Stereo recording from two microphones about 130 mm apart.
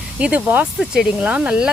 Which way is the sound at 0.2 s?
10° right (ahead or behind).